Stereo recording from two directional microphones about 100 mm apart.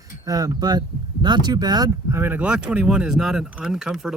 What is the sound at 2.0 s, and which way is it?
Speech, 25° right (ahead or behind).